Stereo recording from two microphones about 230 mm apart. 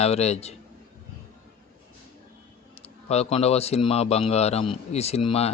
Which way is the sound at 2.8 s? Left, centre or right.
Left.